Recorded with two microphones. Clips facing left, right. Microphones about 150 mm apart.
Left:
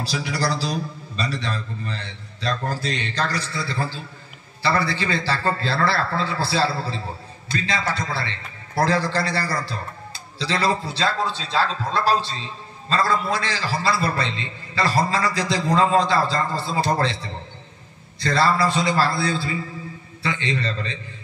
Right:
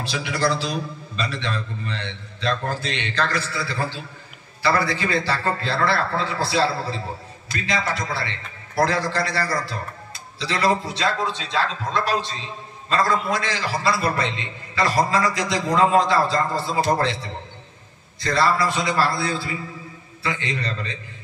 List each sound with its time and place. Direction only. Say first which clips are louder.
0.0 s a man's voice: right 1 dB; 35° left (ahead or behind)
7.4 s a man's voice: even; 30° left (ahead or behind)